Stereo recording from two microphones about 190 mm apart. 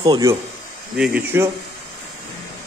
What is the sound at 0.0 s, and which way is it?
Speech, 20° right (ahead or behind).